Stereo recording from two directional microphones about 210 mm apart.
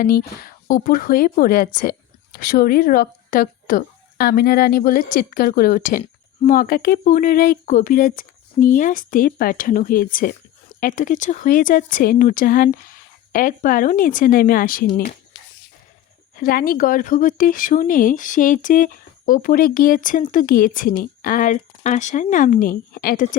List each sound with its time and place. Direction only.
0.0 s a woman's voice: 45° left (ahead or behind)
16.3 s speech: 45° left (ahead or behind)